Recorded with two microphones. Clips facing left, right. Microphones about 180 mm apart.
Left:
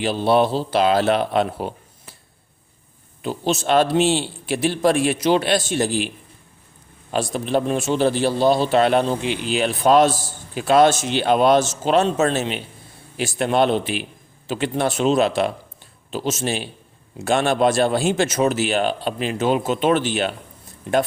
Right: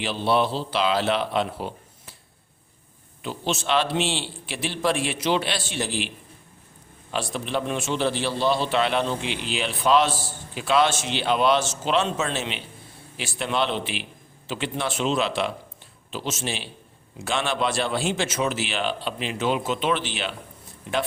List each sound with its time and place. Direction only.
0.0 s a man's voice: 45° left (ahead or behind)
3.2 s a man's voice: 40° left (ahead or behind)